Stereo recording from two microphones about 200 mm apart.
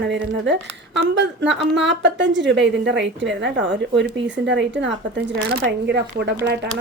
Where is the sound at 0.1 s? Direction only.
60° right (ahead or behind).